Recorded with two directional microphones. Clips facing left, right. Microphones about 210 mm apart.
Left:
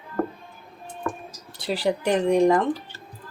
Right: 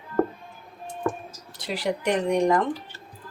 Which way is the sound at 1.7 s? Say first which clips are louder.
Left 2 dB; 30° left (ahead or behind).